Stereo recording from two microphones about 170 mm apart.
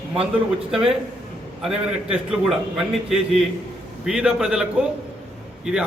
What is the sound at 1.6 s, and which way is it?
A man's voice, 5° right (ahead or behind).